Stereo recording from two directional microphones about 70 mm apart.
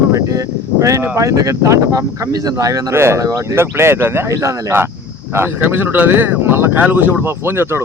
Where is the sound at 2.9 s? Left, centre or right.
Right.